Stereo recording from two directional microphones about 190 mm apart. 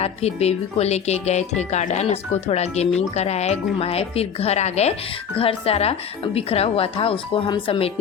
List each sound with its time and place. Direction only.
0.0 s speech: 35° left (ahead or behind)